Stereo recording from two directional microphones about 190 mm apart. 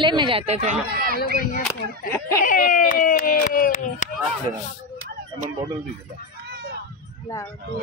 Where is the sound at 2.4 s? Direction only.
45° left (ahead or behind).